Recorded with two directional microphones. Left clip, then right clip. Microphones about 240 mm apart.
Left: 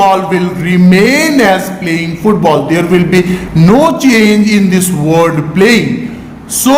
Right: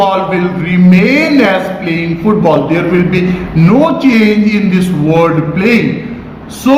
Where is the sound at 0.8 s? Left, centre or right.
Left.